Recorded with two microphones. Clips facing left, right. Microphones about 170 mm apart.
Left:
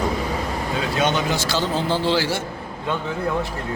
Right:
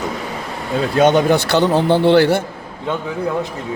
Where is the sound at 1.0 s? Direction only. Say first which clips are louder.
Right 10 dB; 55° right (ahead or behind).